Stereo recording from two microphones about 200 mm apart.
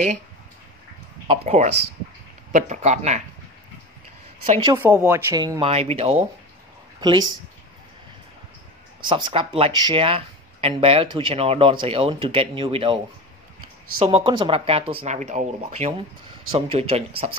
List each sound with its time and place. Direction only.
1.2 s speech: 30° right (ahead or behind)
4.6 s speech: 10° right (ahead or behind)
9.1 s speech: 25° right (ahead or behind)